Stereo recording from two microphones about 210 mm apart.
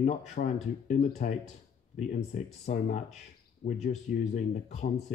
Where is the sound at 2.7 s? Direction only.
50° left (ahead or behind).